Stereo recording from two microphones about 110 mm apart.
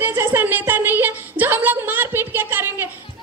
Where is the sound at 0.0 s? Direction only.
20° right (ahead or behind).